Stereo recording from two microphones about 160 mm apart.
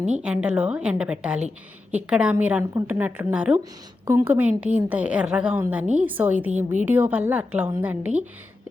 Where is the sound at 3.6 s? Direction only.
25° right (ahead or behind).